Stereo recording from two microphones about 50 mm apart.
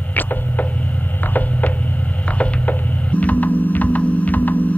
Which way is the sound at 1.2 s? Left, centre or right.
Left.